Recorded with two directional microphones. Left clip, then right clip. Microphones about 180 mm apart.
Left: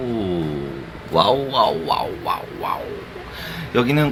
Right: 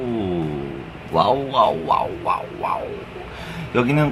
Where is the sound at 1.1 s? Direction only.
25° left (ahead or behind).